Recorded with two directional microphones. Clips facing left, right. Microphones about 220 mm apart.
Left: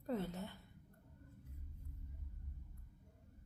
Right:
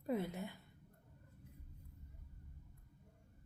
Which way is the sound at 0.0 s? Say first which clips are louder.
Right 2 dB; 10° right (ahead or behind).